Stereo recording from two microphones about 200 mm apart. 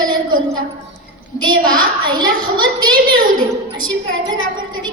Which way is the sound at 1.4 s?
20° right (ahead or behind).